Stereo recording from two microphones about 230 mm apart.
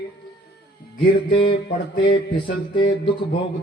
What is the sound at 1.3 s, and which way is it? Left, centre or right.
Speech, left.